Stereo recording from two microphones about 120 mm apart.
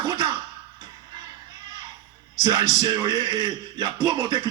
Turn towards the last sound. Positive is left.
turn(degrees=-35)  # may be behind; listen again after turning